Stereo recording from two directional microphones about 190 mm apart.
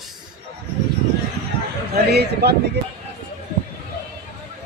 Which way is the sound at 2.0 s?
60° right (ahead or behind).